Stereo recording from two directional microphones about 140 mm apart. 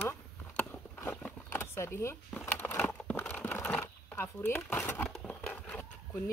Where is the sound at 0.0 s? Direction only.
15° left (ahead or behind).